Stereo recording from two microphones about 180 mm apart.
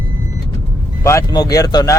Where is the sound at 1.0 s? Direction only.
15° left (ahead or behind).